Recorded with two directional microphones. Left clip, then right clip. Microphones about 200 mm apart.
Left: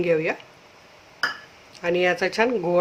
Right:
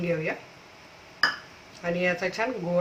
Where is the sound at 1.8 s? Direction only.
50° left (ahead or behind).